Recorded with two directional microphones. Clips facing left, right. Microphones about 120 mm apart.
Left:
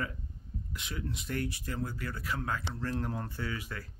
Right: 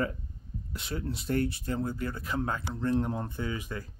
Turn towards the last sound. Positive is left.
turn(degrees=-20)  # may be behind; listen again after turning